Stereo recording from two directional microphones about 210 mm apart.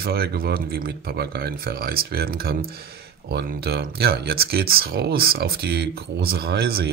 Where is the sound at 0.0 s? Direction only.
50° right (ahead or behind).